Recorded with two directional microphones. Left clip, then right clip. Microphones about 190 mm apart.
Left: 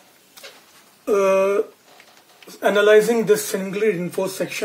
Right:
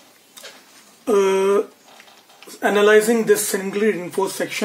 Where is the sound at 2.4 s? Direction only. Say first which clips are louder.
Even; 15° right (ahead or behind).